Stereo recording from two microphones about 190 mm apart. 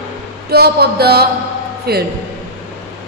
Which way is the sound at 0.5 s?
55° right (ahead or behind).